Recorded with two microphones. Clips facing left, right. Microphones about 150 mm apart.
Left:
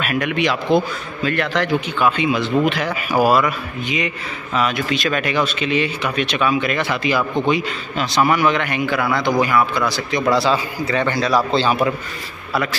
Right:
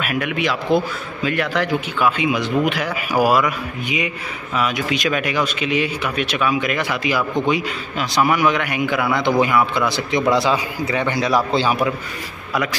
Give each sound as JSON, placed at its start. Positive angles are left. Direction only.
{"t": 0.0, "sound": "speech", "side_deg": -5}